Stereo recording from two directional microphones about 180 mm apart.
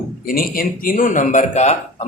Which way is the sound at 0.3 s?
50° left (ahead or behind).